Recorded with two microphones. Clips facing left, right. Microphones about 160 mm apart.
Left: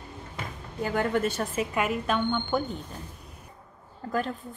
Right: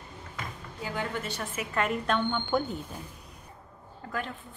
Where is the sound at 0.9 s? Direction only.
50° left (ahead or behind).